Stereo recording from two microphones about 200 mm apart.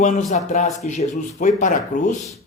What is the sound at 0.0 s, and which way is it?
Speech, 40° left (ahead or behind).